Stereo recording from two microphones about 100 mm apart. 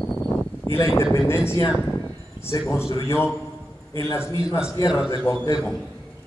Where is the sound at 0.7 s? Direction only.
45° left (ahead or behind).